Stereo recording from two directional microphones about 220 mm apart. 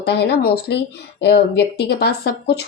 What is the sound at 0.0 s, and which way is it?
Speech, 50° left (ahead or behind).